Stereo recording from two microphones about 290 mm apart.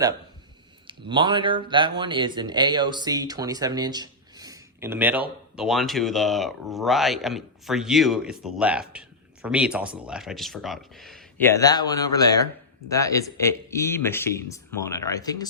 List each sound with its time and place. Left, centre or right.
0.9 s speech: centre